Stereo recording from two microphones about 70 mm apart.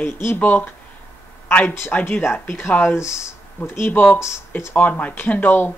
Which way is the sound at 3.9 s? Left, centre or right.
Left.